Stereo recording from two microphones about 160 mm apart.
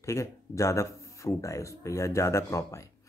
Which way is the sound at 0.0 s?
20° left (ahead or behind).